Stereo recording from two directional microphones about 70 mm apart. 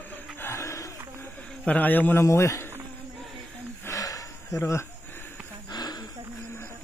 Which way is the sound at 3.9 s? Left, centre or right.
Left.